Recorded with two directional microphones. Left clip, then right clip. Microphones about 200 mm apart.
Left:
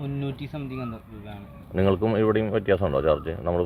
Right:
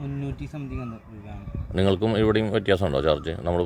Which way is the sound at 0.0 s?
10° right (ahead or behind).